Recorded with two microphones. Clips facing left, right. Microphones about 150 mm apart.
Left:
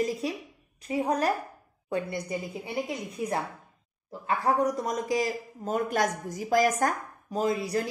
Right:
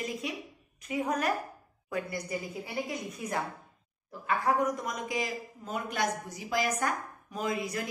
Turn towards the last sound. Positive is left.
turn(degrees=35)  # may be behind; listen again after turning